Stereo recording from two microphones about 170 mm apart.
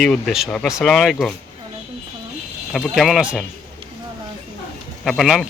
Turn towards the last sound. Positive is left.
turn(degrees=0)  # may be behind; listen again after turning